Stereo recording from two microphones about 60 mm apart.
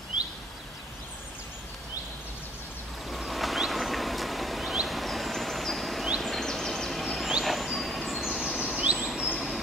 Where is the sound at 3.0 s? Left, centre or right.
Centre.